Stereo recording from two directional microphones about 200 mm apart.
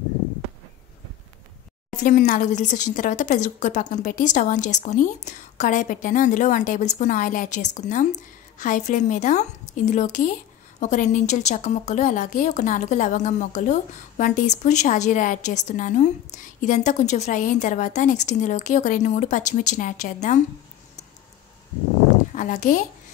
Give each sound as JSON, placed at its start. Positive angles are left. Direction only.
{"t": 2.0, "sound": "a woman's voice", "side_deg": 40}
{"t": 22.3, "sound": "a child's voice", "side_deg": 40}